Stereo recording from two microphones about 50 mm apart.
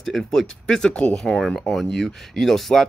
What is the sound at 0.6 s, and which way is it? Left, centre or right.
Speech, centre.